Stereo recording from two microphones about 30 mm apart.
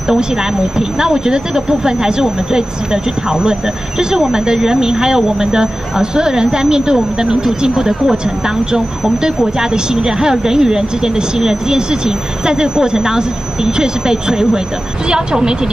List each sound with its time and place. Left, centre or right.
0.1 s speech: right
7.7 s speech: centre
9.6 s speech: right